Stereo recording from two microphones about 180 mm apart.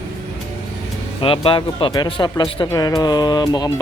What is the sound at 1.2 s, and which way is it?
Speech, 30° left (ahead or behind).